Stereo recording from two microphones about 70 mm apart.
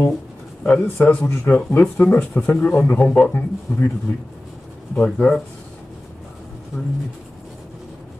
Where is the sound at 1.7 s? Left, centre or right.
Left.